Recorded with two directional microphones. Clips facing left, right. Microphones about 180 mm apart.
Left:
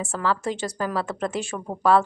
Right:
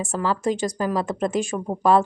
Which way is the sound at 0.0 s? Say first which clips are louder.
Right 2 dB; 15° right (ahead or behind).